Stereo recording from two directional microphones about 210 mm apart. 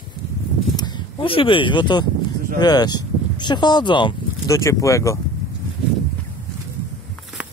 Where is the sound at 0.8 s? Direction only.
20° left (ahead or behind).